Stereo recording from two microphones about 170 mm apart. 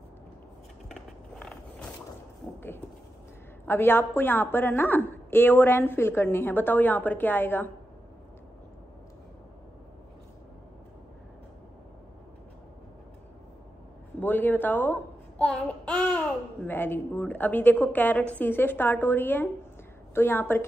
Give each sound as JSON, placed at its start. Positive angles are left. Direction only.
{"t": 0.8, "sound": "skateboard", "side_deg": 0}
{"t": 3.6, "sound": "a woman's voice", "side_deg": 10}
{"t": 14.2, "sound": "a child's voice", "side_deg": 10}